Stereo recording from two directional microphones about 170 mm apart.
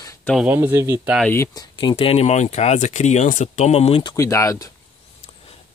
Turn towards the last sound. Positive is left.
turn(degrees=20)  # may be behind; listen again after turning